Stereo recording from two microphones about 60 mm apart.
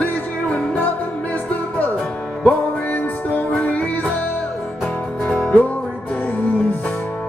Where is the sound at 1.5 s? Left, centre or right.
Left.